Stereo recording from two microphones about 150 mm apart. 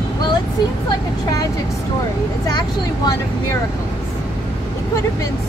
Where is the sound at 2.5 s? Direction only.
25° left (ahead or behind).